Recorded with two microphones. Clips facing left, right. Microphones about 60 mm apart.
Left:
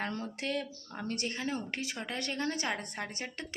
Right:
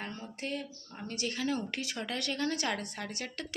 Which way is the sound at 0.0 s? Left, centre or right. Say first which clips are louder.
Left 4 dB; left.